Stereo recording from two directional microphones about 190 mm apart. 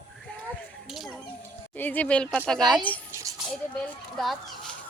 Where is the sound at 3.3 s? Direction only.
15° right (ahead or behind).